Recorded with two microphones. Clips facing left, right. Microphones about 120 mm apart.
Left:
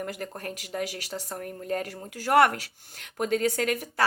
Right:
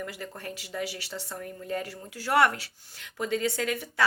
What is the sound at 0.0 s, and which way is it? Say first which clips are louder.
Speech: left 3 dB; 45° left (ahead or behind).